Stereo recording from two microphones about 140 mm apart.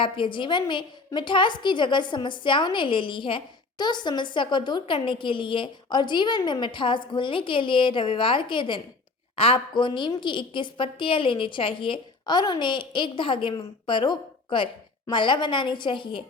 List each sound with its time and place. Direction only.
0.0 s a woman's voice: 35° left (ahead or behind)